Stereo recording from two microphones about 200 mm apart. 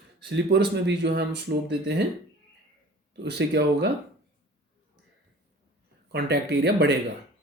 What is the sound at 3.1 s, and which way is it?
Speech, 55° right (ahead or behind).